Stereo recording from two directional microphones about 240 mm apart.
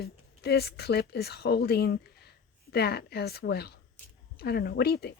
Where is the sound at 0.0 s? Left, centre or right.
Left.